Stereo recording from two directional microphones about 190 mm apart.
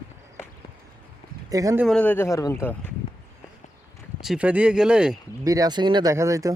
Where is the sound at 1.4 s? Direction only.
20° right (ahead or behind).